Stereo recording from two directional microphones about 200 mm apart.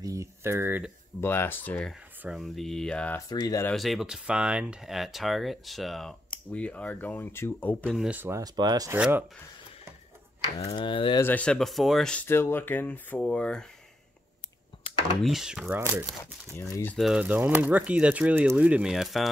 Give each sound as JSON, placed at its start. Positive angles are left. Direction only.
{"t": 0.0, "sound": "speech", "side_deg": -15}
{"t": 1.2, "sound": "speech", "side_deg": 10}
{"t": 3.3, "sound": "speech", "side_deg": 20}
{"t": 3.7, "sound": "speech", "side_deg": 0}
{"t": 7.8, "sound": "speech", "side_deg": -5}
{"t": 10.6, "sound": "speech", "side_deg": 20}
{"t": 11.2, "sound": "speech", "side_deg": 5}
{"t": 15.2, "sound": "speech", "side_deg": 0}
{"t": 16.5, "sound": "speech", "side_deg": 15}